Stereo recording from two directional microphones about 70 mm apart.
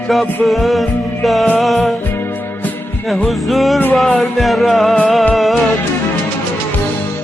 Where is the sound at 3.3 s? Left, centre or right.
Centre.